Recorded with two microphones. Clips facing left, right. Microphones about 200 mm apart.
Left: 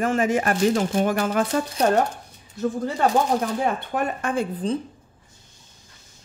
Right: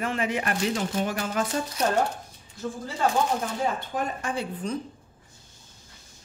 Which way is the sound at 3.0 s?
60° left (ahead or behind).